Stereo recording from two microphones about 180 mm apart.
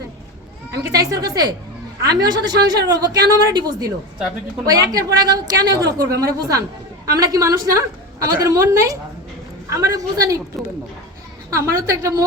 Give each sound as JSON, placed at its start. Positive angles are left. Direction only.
{"t": 0.8, "sound": "a woman's voice", "side_deg": -20}
{"t": 11.5, "sound": "a woman's voice", "side_deg": -15}